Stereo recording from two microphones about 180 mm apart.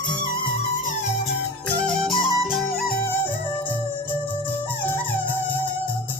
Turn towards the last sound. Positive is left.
turn(degrees=10)  # may be behind; listen again after turning